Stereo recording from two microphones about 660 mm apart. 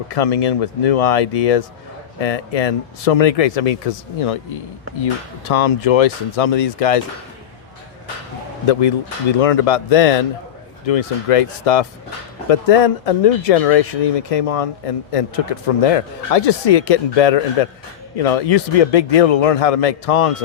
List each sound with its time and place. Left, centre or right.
0.1 s speech: left
5.5 s speech: left
8.6 s speech: left